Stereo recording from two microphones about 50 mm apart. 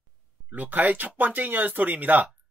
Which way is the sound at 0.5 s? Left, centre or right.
Right.